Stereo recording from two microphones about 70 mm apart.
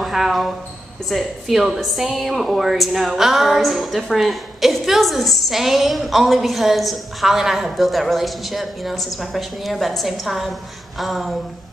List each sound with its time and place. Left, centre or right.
0.0 s a woman's voice: centre